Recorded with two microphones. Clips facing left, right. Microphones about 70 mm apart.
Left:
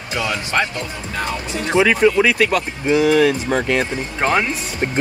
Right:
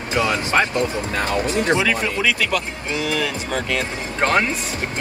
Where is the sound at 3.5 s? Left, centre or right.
Left.